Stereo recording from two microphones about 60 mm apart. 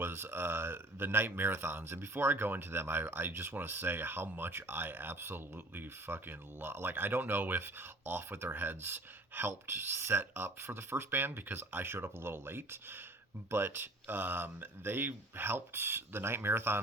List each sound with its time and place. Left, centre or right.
0.0 s speech: right